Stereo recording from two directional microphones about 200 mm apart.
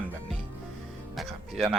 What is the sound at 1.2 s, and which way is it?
Speech, centre (ahead or behind).